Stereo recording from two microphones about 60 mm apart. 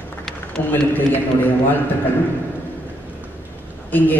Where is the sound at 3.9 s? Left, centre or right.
Left.